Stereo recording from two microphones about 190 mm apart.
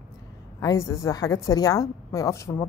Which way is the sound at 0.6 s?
15° left (ahead or behind).